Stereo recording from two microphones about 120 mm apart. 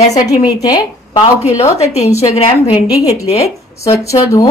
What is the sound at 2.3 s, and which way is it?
Speech, 55° left (ahead or behind).